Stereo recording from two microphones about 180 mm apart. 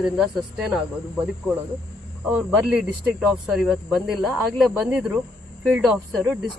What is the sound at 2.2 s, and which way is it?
Speech, centre (ahead or behind).